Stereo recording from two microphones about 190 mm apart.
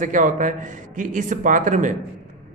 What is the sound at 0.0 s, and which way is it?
A man's voice, 45° right (ahead or behind).